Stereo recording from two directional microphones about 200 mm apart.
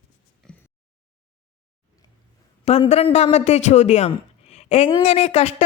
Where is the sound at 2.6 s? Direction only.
30° left (ahead or behind).